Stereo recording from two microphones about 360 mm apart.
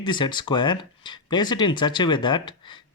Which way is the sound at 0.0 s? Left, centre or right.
Centre.